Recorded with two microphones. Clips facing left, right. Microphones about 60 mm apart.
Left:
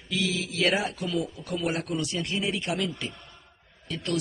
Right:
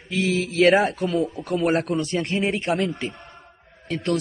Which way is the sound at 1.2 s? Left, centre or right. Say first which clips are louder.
Right 7 dB; right.